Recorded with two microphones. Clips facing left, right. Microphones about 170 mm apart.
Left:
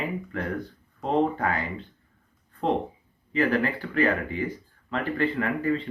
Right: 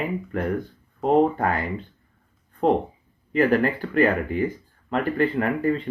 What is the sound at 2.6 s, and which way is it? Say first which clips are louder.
Speech: right 5 dB; 50° right (ahead or behind).